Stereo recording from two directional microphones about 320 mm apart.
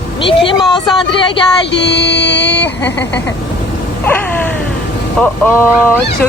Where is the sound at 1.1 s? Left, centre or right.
Centre.